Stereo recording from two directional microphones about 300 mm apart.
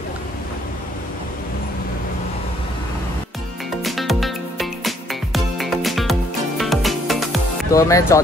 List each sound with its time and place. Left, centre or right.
3.8 s music: centre
7.7 s speech: centre